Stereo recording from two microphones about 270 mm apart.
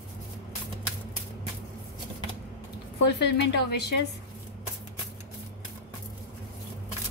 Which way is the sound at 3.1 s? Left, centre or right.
Left.